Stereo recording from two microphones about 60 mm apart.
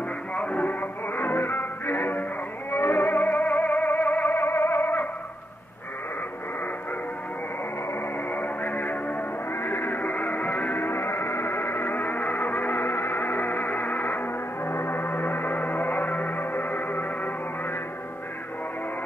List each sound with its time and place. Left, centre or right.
0.4 s music: left
8.3 s music: left